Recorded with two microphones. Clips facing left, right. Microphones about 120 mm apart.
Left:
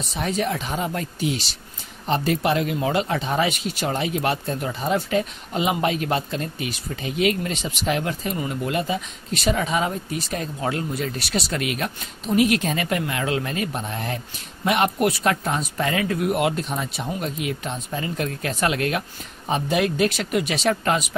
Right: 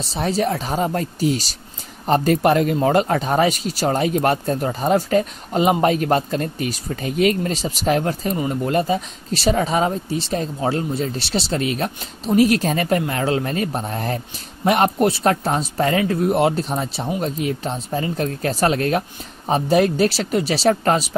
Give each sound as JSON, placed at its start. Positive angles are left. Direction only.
{"t": 0.0, "sound": "speech", "side_deg": -35}